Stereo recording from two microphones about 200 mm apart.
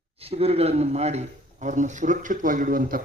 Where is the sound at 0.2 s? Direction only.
30° right (ahead or behind).